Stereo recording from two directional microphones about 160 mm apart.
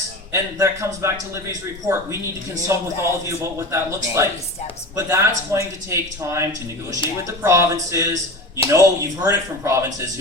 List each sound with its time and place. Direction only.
0.3 s a man's voice: 20° right (ahead or behind)